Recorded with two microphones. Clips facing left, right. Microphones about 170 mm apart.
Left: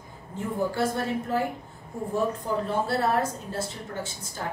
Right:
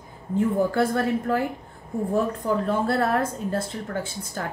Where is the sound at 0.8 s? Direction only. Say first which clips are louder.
Right 4 dB; 55° right (ahead or behind).